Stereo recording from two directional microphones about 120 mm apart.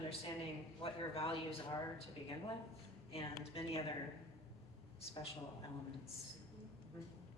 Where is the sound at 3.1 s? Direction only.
55° left (ahead or behind).